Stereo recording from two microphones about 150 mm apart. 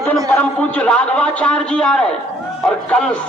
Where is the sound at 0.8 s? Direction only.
10° left (ahead or behind).